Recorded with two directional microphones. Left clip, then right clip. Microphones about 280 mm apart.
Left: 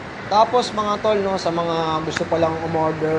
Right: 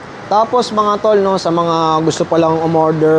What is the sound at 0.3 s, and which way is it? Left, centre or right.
Speech, right.